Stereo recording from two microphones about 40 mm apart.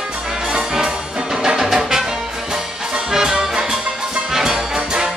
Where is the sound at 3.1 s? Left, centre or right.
Centre.